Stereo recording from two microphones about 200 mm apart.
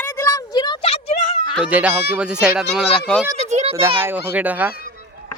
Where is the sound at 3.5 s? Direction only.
35° right (ahead or behind).